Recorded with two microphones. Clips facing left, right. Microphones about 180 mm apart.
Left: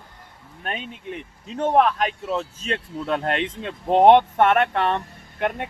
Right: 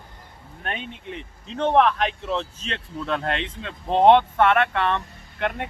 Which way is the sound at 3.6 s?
15° left (ahead or behind).